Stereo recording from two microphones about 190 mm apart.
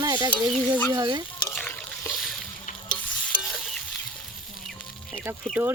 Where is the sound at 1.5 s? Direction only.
5° left (ahead or behind).